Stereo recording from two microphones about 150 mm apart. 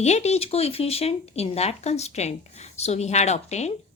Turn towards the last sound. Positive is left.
turn(degrees=50)  # may be behind; listen again after turning